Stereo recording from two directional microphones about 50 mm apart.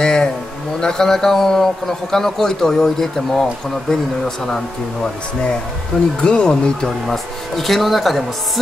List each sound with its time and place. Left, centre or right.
0.0 s a sound: centre
0.7 s a man's voice: centre
6.2 s a man's voice: centre
7.1 s speech: centre